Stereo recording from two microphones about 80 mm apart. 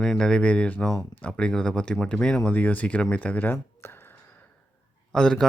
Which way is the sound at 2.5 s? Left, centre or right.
Left.